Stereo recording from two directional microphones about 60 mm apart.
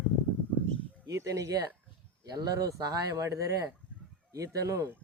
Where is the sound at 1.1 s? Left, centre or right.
Right.